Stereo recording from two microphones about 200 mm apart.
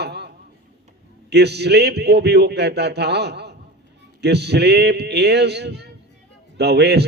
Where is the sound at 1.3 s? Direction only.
55° right (ahead or behind).